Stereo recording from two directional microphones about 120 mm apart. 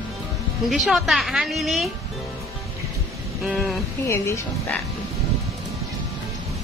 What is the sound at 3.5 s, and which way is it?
Speech, centre (ahead or behind).